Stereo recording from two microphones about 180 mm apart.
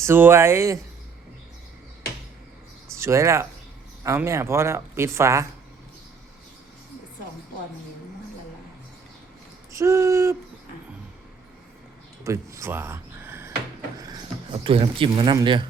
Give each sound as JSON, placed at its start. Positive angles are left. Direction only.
{"t": 0.0, "sound": "speech", "side_deg": -10}
{"t": 2.9, "sound": "speech", "side_deg": -15}
{"t": 9.7, "sound": "speech", "side_deg": -15}
{"t": 12.2, "sound": "a sound", "side_deg": -15}
{"t": 14.6, "sound": "speech", "side_deg": -30}